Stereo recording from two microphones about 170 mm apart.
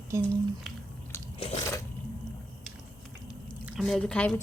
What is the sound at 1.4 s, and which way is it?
Biting, 40° left (ahead or behind).